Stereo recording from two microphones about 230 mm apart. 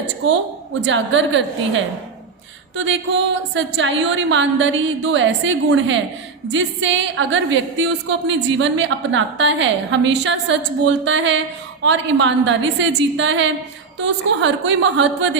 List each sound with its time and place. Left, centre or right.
0.9 s a woman's voice: right